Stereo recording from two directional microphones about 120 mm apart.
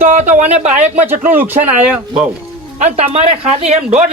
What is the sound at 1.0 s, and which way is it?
Speech, 15° right (ahead or behind).